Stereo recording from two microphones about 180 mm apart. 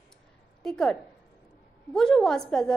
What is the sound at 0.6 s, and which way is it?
A woman's voice, 5° left (ahead or behind).